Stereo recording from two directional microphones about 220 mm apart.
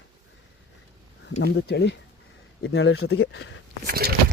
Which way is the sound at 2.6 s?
65° left (ahead or behind).